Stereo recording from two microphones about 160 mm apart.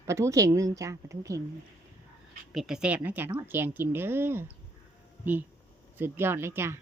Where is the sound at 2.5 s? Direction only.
Centre (ahead or behind).